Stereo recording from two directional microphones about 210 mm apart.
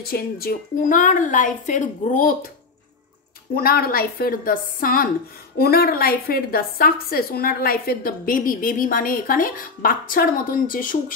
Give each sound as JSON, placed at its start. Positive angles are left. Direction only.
{"t": 0.0, "sound": "a woman's voice", "side_deg": 45}
{"t": 3.5, "sound": "a woman's voice", "side_deg": 45}